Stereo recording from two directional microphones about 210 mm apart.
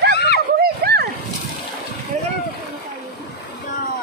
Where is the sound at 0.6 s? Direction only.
50° right (ahead or behind).